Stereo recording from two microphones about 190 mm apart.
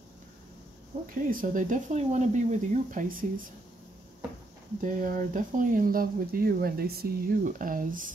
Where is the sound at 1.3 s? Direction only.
45° right (ahead or behind).